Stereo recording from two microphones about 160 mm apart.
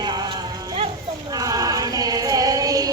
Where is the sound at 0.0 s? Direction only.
25° right (ahead or behind).